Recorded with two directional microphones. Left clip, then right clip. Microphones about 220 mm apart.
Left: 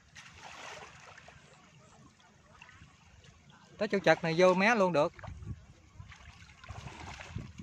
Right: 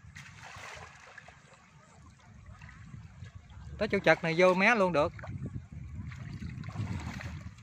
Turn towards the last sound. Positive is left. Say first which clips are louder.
# right 3 dB
turn(degrees=-20)  # may be behind; listen again after turning